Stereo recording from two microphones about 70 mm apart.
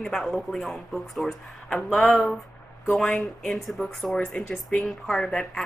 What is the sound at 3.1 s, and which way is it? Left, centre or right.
Speech, centre.